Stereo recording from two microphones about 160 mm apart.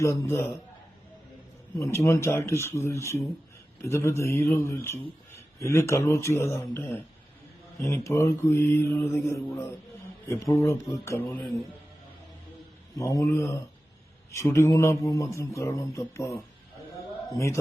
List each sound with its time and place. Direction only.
0.0 s mantra: 15° left (ahead or behind)
1.8 s mantra: 15° left (ahead or behind)
13.0 s speech: 20° left (ahead or behind)
17.3 s mantra: 15° left (ahead or behind)